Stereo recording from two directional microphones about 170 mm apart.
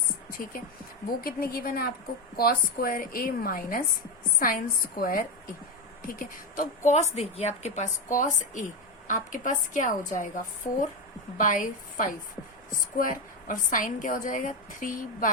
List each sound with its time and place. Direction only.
0.3 s a woman's voice: 55° left (ahead or behind)